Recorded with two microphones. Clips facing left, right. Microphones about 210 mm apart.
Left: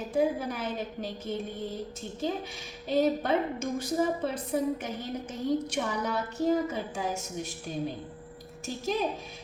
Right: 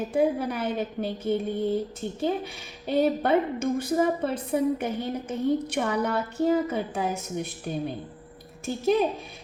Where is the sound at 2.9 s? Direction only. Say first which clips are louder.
Right 3 dB; 60° right (ahead or behind).